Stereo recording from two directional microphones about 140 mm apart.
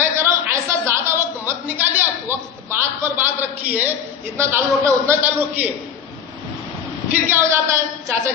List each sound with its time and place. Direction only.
0.0 s a sound: 20° right (ahead or behind)
4.4 s a man's voice: 20° right (ahead or behind)
7.1 s a man's voice: 15° right (ahead or behind)